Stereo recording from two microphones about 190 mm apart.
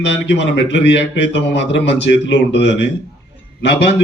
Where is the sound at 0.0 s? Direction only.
70° left (ahead or behind).